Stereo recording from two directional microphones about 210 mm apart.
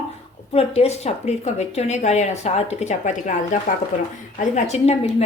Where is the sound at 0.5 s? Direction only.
30° left (ahead or behind).